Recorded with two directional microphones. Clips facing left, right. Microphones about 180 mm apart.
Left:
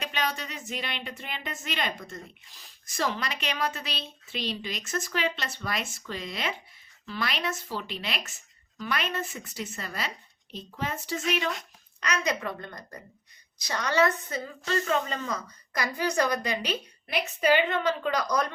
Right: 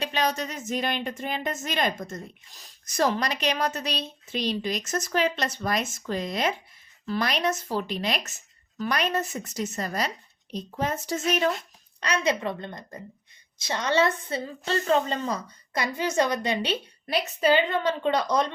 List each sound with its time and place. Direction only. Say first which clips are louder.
0.0 s a woman's voice: right 5 dB; 35° right (ahead or behind)
11.9 s a woman's voice: right 4 dB; 30° right (ahead or behind)